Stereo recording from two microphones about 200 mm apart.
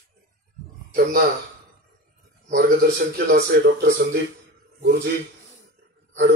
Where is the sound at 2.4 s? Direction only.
50° right (ahead or behind).